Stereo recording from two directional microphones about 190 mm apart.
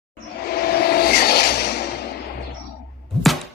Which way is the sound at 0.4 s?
55° left (ahead or behind).